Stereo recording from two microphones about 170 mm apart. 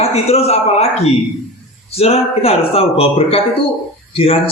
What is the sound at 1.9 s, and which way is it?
A man's voice, 35° left (ahead or behind).